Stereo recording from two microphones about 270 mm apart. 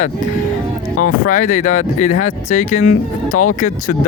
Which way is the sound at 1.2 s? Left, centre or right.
Left.